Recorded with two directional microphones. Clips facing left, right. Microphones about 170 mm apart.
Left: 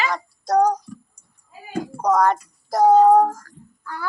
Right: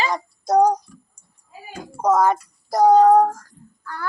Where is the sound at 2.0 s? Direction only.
5° right (ahead or behind); by 4.1 s 10° left (ahead or behind).